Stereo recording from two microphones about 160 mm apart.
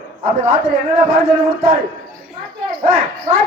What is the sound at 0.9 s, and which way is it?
Speech, 65° right (ahead or behind).